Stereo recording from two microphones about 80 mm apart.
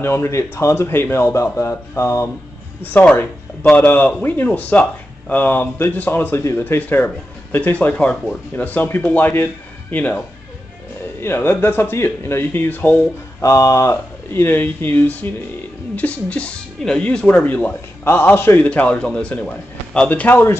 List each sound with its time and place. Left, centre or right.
0.0 s a man's voice: left
2.8 s a man's voice: left
11.1 s speech: left
13.4 s speech: left
18.7 s a man's voice: centre
20.1 s speech: left